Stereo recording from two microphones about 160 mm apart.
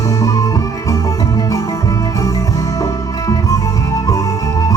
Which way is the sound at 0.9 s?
20° left (ahead or behind).